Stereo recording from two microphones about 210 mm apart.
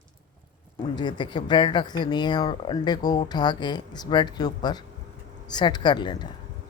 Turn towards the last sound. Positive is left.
turn(degrees=20)  # may be behind; listen again after turning